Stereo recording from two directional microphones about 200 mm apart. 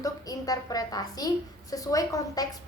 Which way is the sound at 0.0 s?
20° left (ahead or behind).